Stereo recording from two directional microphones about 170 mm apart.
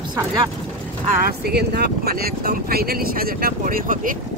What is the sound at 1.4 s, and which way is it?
Speech, 70° right (ahead or behind).